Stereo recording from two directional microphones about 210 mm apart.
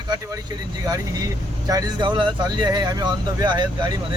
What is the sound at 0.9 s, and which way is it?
Speech, 15° right (ahead or behind).